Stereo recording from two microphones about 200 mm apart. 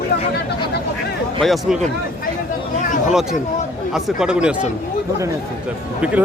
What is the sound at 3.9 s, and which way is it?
Speech, centre (ahead or behind).